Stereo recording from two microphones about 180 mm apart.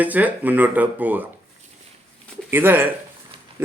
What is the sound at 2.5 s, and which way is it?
Speech, 10° right (ahead or behind).